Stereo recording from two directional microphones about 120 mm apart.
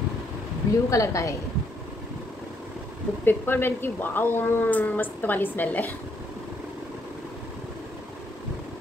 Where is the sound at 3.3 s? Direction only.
20° left (ahead or behind).